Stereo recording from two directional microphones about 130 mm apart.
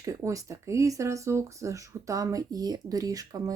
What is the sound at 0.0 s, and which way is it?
Speech, 25° right (ahead or behind).